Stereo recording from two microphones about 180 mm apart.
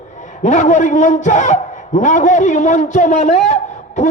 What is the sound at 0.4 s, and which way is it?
A man's voice, 40° left (ahead or behind).